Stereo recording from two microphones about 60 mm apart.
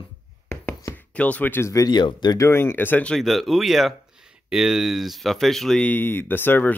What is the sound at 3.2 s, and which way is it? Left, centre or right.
Speech, centre.